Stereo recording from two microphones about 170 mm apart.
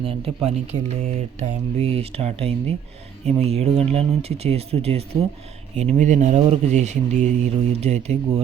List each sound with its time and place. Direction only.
0.0 s speech: 35° right (ahead or behind)